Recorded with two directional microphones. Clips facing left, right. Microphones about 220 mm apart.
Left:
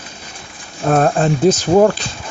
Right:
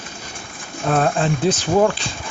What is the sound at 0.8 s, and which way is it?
Speech, 45° left (ahead or behind).